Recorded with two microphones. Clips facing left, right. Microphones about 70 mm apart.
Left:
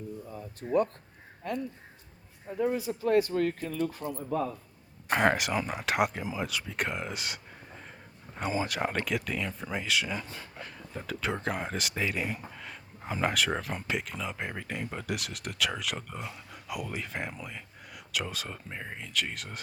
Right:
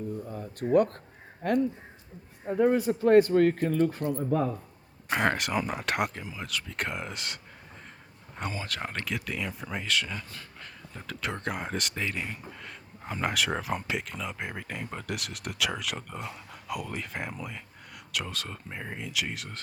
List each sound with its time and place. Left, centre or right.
1.4 s a man's voice: right
5.1 s speech: centre
8.5 s speech: centre